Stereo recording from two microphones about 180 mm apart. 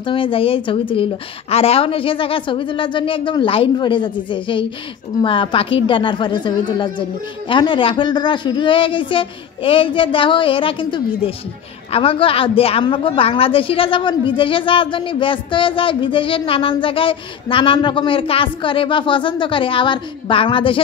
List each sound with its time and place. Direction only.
0.0 s a woman's voice: 30° left (ahead or behind)